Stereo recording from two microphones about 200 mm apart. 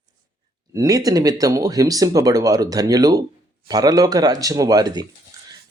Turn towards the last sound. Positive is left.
turn(degrees=-20)  # may be behind; listen again after turning